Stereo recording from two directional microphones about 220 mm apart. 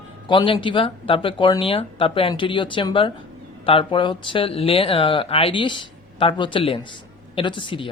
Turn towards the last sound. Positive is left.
turn(degrees=20)  # may be behind; listen again after turning